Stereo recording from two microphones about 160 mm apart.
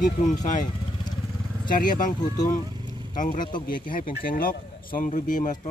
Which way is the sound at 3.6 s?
60° left (ahead or behind).